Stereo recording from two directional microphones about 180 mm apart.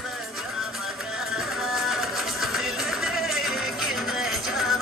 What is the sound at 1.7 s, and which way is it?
Music, centre (ahead or behind).